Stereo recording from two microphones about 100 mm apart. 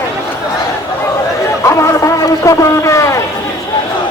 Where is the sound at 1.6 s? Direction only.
30° left (ahead or behind).